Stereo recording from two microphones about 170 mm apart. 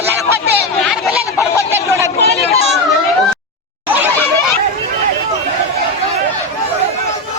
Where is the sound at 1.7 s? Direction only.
15° right (ahead or behind).